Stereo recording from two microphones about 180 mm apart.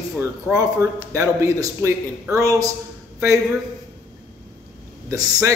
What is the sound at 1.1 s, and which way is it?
A man's voice, 15° right (ahead or behind).